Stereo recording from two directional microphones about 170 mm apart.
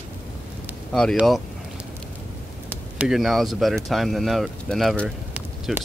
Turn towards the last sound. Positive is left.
turn(degrees=-5)  # may be behind; listen again after turning